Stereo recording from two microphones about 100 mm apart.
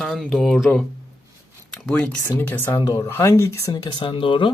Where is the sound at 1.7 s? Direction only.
10° left (ahead or behind).